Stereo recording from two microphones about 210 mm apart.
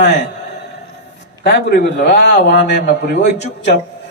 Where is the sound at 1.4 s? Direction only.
50° left (ahead or behind).